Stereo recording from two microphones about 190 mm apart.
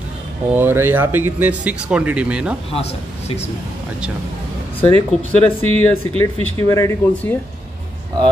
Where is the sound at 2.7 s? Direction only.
35° left (ahead or behind).